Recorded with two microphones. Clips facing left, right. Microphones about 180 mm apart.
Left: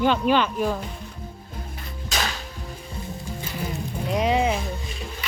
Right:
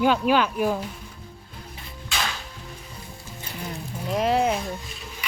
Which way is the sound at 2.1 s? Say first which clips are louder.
Left 2 dB; 40° left (ahead or behind).